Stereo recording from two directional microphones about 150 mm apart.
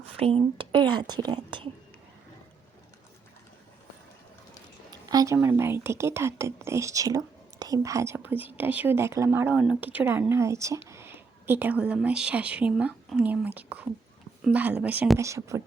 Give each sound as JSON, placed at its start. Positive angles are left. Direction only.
{"t": 0.2, "sound": "speech", "side_deg": -40}
{"t": 4.9, "sound": "speech", "side_deg": -25}
{"t": 15.2, "sound": "speech", "side_deg": -20}